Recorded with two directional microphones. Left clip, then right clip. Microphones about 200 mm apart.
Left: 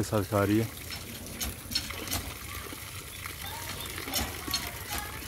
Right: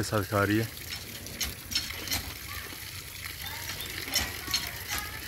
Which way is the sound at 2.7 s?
25° left (ahead or behind).